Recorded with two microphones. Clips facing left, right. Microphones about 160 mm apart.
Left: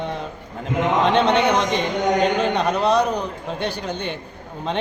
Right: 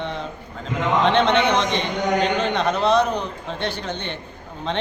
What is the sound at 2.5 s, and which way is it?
Speech, 10° left (ahead or behind).